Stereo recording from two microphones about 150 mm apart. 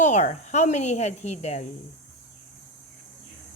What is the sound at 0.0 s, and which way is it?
Speech, 50° left (ahead or behind).